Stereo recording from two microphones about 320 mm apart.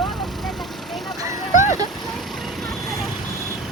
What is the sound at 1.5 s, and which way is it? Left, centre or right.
Vehicle, left.